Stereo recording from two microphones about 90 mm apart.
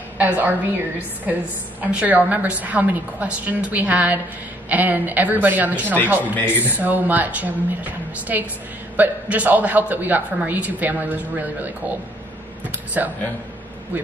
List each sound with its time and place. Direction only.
0.2 s a man's voice: 20° right (ahead or behind)
6.3 s speech: 25° left (ahead or behind)
6.8 s a man's voice: 20° right (ahead or behind)